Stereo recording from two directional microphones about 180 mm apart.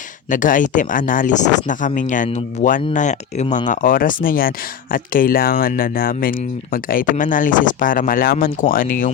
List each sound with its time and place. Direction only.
0.3 s speech: 45° left (ahead or behind)